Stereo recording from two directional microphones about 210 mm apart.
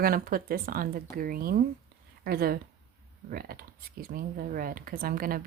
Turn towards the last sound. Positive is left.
turn(degrees=-45)  # may be behind; listen again after turning